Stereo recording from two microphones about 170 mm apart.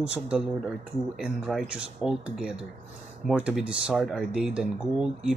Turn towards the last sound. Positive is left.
turn(degrees=-5)  # may be behind; listen again after turning